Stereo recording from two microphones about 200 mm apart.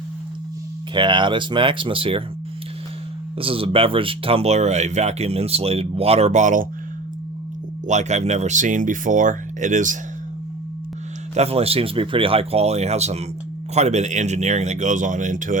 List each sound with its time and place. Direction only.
0.9 s speech: 25° right (ahead or behind)
3.3 s speech: 25° right (ahead or behind)
7.9 s speech: 35° right (ahead or behind)
11.3 s speech: 30° right (ahead or behind)